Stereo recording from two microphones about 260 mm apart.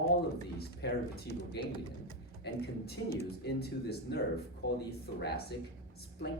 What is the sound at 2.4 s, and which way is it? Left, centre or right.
Speech, left.